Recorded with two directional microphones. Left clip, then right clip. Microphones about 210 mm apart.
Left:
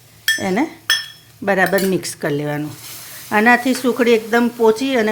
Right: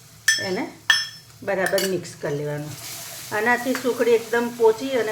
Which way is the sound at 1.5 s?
55° left (ahead or behind).